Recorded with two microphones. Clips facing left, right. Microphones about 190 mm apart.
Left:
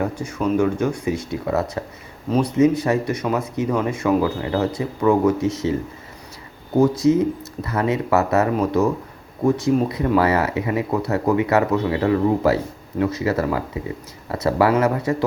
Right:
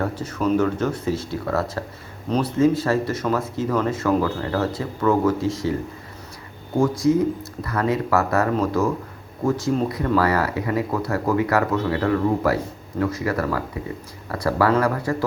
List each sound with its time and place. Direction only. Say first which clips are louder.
0.0 s speech: left 1 dB; 10° left (ahead or behind)
6.7 s speech: left 3 dB; 20° left (ahead or behind)